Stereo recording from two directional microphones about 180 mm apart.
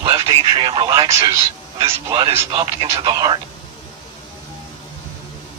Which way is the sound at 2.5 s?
30° right (ahead or behind).